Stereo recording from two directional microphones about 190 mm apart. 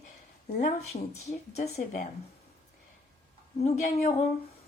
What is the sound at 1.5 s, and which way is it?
Speech, 35° left (ahead or behind).